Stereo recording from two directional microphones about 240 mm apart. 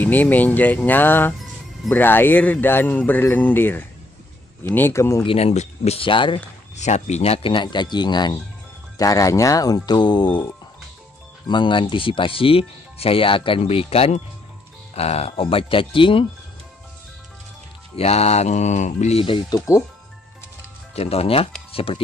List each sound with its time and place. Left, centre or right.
0.0 s speech: centre
5.2 s speech: left
17.9 s speech: left
20.9 s speech: left